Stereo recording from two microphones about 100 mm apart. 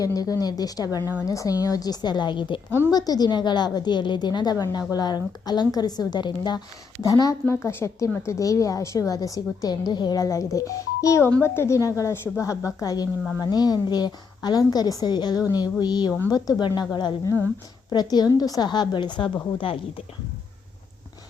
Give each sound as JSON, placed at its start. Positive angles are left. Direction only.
{"t": 0.0, "sound": "a woman's voice", "side_deg": 35}
{"t": 2.9, "sound": "a woman's voice", "side_deg": 40}
{"t": 7.1, "sound": "a woman's voice", "side_deg": 35}
{"t": 7.4, "sound": "a woman's voice", "side_deg": 25}